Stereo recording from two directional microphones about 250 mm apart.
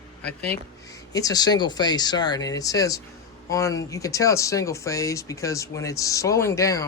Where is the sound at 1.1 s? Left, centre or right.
Centre.